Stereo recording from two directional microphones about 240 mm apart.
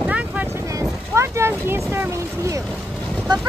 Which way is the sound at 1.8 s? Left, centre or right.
Centre.